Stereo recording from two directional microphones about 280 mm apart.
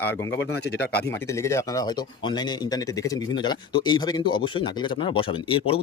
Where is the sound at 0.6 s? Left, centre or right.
Left.